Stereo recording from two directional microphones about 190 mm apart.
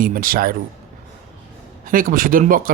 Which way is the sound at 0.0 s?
45° right (ahead or behind).